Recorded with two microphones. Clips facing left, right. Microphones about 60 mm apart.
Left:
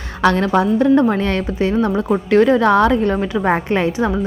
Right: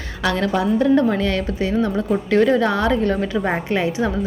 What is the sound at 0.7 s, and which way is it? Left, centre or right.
A woman's voice, left.